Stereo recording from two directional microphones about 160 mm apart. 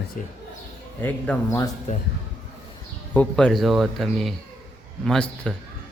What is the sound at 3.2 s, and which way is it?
A man's voice, 5° left (ahead or behind).